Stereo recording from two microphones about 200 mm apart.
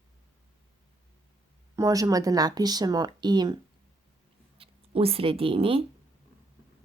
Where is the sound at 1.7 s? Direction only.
15° right (ahead or behind).